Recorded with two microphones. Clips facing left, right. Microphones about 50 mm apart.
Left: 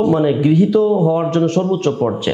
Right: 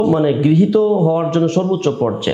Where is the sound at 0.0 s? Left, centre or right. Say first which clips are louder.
Even; right.